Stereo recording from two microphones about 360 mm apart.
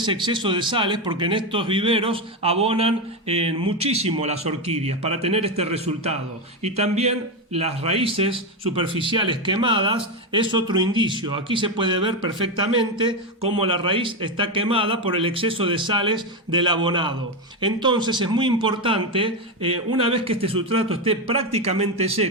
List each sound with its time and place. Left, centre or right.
0.0 s speech: centre